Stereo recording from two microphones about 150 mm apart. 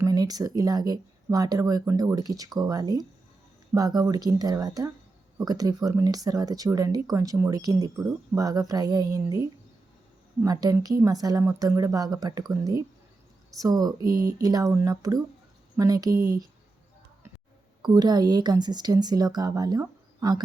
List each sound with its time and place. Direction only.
0.0 s speech: 25° right (ahead or behind)
17.8 s speech: 25° right (ahead or behind)